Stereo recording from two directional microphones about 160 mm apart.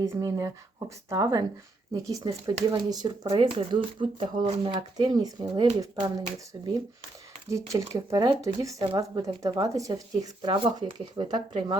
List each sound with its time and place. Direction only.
0.0 s speech: 25° right (ahead or behind)